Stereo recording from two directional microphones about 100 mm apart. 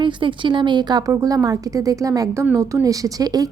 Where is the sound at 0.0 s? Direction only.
55° right (ahead or behind).